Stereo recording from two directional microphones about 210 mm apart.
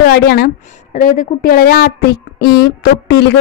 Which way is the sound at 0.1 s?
50° left (ahead or behind).